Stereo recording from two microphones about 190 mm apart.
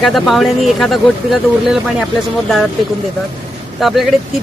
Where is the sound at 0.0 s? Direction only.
Centre (ahead or behind).